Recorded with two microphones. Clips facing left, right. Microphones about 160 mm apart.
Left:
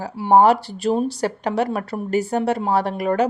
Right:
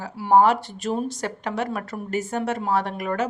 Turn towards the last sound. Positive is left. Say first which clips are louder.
# left 6 dB
turn(degrees=35)  # may be behind; listen again after turning